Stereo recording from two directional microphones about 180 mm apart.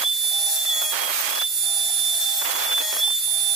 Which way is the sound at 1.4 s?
Centre (ahead or behind).